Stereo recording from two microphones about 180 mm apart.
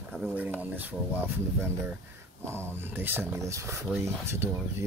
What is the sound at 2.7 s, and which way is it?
Speech, 10° right (ahead or behind).